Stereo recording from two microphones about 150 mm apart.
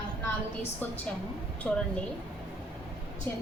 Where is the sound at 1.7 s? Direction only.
5° left (ahead or behind).